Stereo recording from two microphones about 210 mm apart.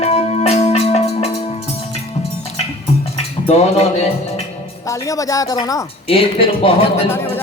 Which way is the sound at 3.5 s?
30° left (ahead or behind).